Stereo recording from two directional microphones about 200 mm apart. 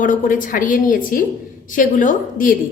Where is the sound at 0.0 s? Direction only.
40° left (ahead or behind).